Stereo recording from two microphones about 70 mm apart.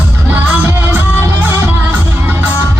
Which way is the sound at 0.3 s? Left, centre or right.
Right.